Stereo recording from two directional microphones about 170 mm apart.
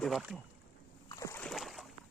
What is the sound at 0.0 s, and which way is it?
Speech, centre (ahead or behind).